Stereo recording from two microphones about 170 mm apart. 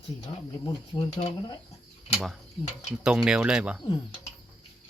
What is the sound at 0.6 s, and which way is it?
Speech, 25° left (ahead or behind).